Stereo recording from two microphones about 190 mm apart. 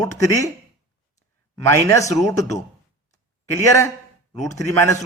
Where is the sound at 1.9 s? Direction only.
15° left (ahead or behind).